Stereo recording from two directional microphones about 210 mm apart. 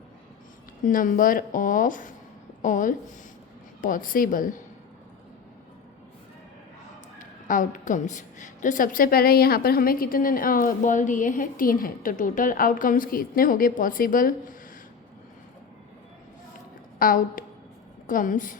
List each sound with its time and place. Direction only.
0.9 s a woman's voice: 40° left (ahead or behind)
7.2 s a woman's voice: 40° left (ahead or behind)
17.0 s a woman's voice: 40° left (ahead or behind)